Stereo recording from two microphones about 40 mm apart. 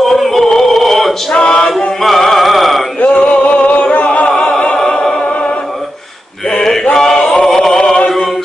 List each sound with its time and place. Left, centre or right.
0.1 s a sound: centre
1.3 s male singing: centre
2.0 s music: centre
3.0 s male singing: left
4.4 s a capella: left
6.6 s male singing: centre
7.3 s a sound: centre